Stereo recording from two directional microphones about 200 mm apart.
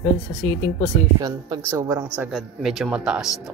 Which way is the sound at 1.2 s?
20° right (ahead or behind).